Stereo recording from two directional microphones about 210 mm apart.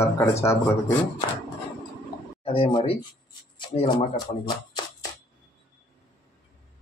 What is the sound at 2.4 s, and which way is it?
Speech, 25° left (ahead or behind).